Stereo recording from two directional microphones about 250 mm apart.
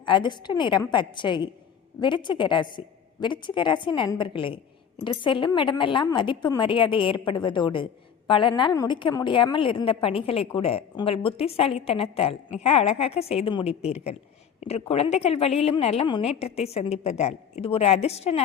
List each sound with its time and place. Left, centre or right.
0.0 s a woman's voice: centre